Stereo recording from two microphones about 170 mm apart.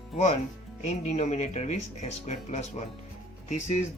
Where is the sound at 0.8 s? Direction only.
40° left (ahead or behind).